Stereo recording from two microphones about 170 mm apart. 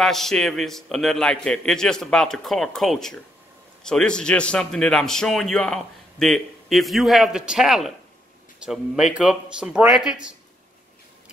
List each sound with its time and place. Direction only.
0.0 s a man's voice: centre (ahead or behind)